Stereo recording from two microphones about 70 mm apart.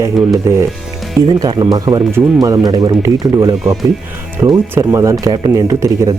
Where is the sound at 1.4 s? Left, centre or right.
Right.